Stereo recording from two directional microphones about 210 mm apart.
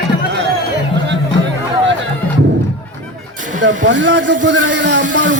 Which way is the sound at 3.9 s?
60° right (ahead or behind).